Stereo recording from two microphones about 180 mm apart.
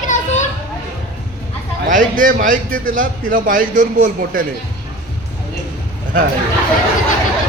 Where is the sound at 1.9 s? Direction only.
45° right (ahead or behind).